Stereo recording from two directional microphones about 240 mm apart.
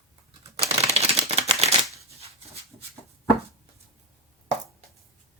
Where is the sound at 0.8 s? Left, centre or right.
Right.